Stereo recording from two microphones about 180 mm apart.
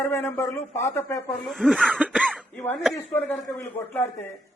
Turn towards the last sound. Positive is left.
turn(degrees=15)  # may be behind; listen again after turning